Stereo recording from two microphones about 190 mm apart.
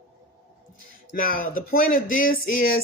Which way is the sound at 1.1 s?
45° left (ahead or behind).